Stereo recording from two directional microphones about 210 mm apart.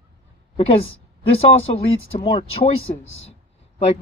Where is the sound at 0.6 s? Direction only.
25° left (ahead or behind).